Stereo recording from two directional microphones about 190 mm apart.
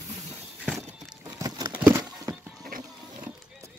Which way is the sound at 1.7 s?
5° right (ahead or behind).